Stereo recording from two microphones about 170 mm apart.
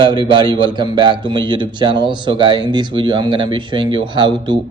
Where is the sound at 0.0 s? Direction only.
25° right (ahead or behind).